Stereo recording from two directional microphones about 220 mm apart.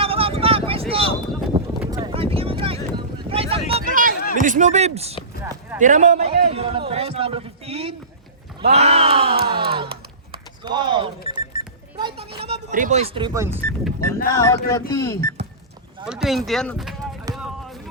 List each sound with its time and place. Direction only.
0.0 s vehicle: 25° right (ahead or behind)
0.7 s wind noise: 25° right (ahead or behind)
1.5 s a sound: 15° right (ahead or behind)
3.2 s wind noise: 25° right (ahead or behind)
3.7 s a sound: 35° right (ahead or behind)
4.4 s speech: 35° right (ahead or behind)
5.4 s a sound: 15° right (ahead or behind)
5.8 s a man's voice: 35° right (ahead or behind)
11.3 s alarm clock: 20° right (ahead or behind)
12.5 s a man's voice: 35° right (ahead or behind); by 13.5 s 15° right (ahead or behind)
13.6 s speech: 10° left (ahead or behind)
16.0 s speech: centre (ahead or behind)
17.3 s music: centre (ahead or behind)